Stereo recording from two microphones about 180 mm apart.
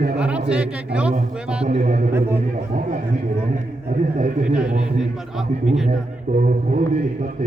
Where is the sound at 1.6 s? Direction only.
40° right (ahead or behind).